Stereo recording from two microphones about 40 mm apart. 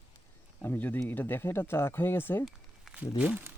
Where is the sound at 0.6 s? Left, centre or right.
Left.